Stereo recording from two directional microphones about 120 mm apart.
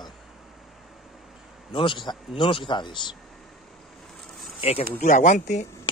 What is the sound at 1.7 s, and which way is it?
A man's voice, 45° left (ahead or behind).